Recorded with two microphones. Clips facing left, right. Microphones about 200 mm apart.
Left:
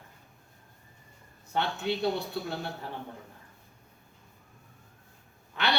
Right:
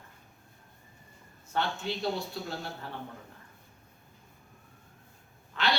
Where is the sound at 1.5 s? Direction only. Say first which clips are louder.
Left 2 dB; 60° left (ahead or behind).